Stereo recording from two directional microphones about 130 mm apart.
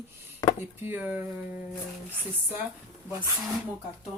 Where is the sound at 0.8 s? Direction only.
15° right (ahead or behind).